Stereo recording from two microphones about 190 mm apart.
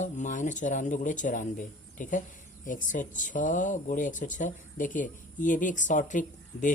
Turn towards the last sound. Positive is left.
turn(degrees=40)  # may be behind; listen again after turning